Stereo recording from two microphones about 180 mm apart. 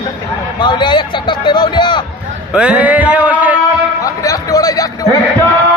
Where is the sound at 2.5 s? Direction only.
5° right (ahead or behind).